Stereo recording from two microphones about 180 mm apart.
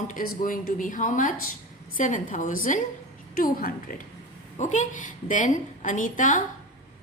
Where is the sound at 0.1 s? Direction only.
50° left (ahead or behind).